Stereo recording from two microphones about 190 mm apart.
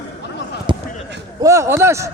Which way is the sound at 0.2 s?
65° left (ahead or behind).